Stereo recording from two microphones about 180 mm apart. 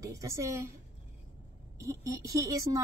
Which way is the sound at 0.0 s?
20° right (ahead or behind).